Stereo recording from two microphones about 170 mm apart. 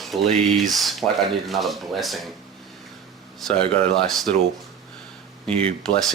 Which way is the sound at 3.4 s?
Centre (ahead or behind).